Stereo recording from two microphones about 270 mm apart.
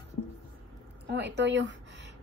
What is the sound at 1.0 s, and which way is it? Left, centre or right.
A woman's voice, right.